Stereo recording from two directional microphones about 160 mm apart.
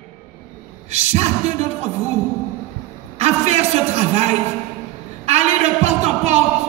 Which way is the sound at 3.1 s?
40° right (ahead or behind).